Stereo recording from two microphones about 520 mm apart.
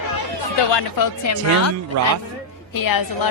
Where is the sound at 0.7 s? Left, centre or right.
Left.